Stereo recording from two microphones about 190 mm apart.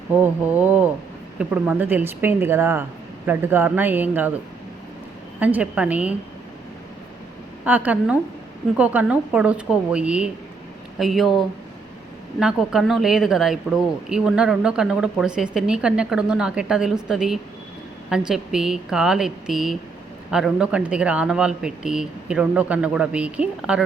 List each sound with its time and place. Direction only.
0.1 s a woman's voice: 10° right (ahead or behind)
5.4 s a woman's voice: 10° right (ahead or behind)
7.6 s a woman's voice: 10° right (ahead or behind)